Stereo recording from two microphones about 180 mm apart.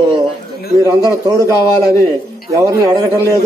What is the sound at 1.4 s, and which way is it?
Speech, 20° left (ahead or behind).